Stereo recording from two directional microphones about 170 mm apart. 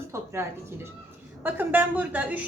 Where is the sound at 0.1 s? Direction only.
15° right (ahead or behind).